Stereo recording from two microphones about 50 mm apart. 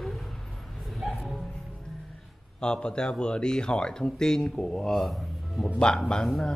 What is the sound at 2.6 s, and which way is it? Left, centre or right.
Speech, centre.